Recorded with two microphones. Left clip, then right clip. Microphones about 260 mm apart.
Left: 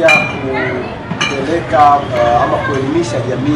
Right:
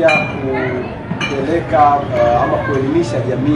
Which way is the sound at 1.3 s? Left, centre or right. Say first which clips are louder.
Even; centre.